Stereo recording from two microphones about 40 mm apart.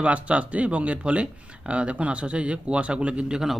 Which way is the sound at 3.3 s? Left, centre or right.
Centre.